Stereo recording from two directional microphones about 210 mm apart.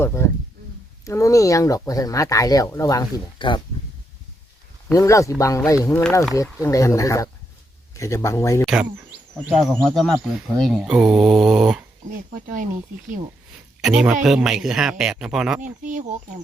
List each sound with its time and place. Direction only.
0.0 s speech: 10° left (ahead or behind)
4.9 s speech: 15° left (ahead or behind)
6.0 s speech: 5° left (ahead or behind)
8.6 s speech: 5° right (ahead or behind)
12.1 s speech: 45° right (ahead or behind)
13.8 s speech: 5° right (ahead or behind)
15.6 s speech: 35° right (ahead or behind)